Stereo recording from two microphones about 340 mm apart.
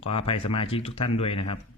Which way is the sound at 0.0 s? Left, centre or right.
Centre.